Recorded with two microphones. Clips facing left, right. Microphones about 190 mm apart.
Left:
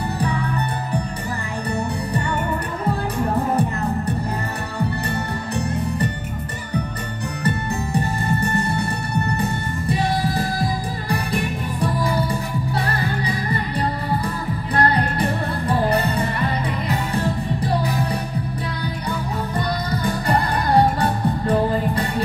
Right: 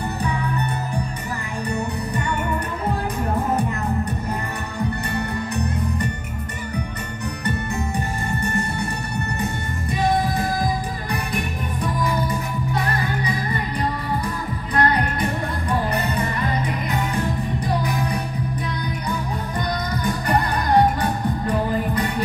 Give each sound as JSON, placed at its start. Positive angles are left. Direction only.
{"t": 11.8, "sound": "music", "side_deg": 30}
{"t": 14.8, "sound": "music", "side_deg": 30}
{"t": 21.0, "sound": "music", "side_deg": 30}